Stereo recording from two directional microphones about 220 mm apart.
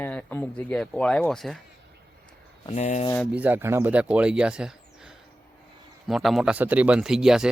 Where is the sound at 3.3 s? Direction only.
10° right (ahead or behind).